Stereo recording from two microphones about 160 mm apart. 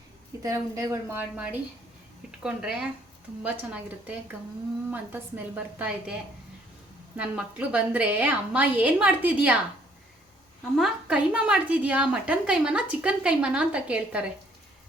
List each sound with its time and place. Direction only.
0.4 s a woman's voice: 20° right (ahead or behind)
7.2 s a woman's voice: 10° right (ahead or behind)
10.8 s a woman's voice: 5° right (ahead or behind)